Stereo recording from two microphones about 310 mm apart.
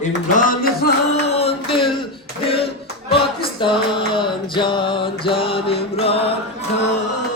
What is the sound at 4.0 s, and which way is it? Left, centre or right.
Music, centre.